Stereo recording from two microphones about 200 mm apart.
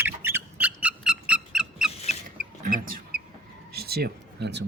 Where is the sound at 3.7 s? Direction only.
50° right (ahead or behind).